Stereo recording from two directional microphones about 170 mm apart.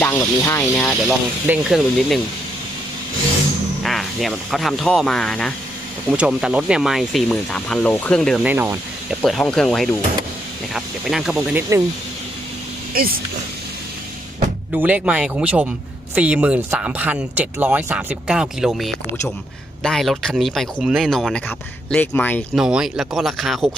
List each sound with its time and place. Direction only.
0.0 s speech: 15° left (ahead or behind)
1.0 s speech: 5° right (ahead or behind)
3.8 s speech: centre (ahead or behind)
8.4 s speech: 10° right (ahead or behind)
9.2 s speech: centre (ahead or behind)
12.9 s speech: 60° right (ahead or behind)
14.7 s speech: 10° right (ahead or behind); by 22.4 s 10° left (ahead or behind)
22.5 s speech: 5° right (ahead or behind)